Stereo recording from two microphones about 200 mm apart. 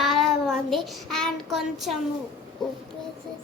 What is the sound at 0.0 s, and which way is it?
Child singing, centre (ahead or behind).